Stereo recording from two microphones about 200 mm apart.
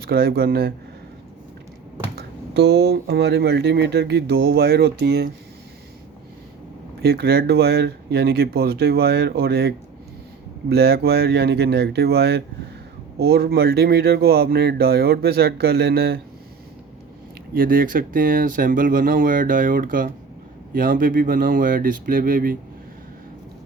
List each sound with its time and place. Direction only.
0.0 s speech: 50° right (ahead or behind)
2.1 s speech: 55° right (ahead or behind)
7.0 s speech: 50° right (ahead or behind)
17.5 s speech: 45° right (ahead or behind)